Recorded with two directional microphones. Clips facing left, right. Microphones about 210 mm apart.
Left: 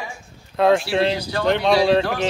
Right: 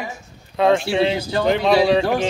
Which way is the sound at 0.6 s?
Centre (ahead or behind).